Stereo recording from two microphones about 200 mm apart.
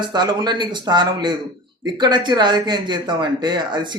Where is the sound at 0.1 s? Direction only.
20° right (ahead or behind).